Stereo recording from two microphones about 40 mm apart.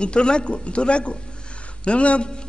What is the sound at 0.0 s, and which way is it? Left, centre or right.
A man's voice, left.